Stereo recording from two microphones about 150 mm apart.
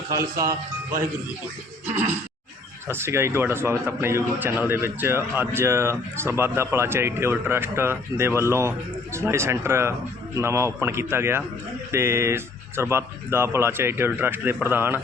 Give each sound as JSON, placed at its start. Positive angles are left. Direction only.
{"t": 0.1, "sound": "speech", "side_deg": -20}
{"t": 1.9, "sound": "a man's voice", "side_deg": -15}